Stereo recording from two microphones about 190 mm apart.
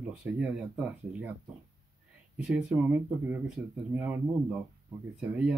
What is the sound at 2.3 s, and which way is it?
Speech, 5° right (ahead or behind).